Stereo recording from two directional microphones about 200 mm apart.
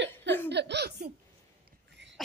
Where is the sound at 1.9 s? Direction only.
65° right (ahead or behind).